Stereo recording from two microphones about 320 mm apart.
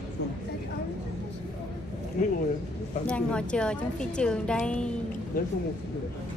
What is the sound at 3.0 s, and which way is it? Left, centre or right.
A woman's voice, centre.